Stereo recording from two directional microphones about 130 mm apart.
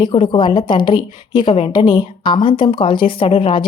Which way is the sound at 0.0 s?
40° left (ahead or behind).